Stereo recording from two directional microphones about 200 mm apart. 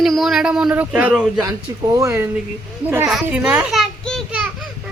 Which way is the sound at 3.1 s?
5° right (ahead or behind).